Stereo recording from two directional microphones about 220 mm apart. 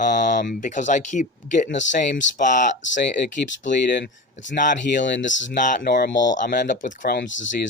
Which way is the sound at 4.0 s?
55° left (ahead or behind).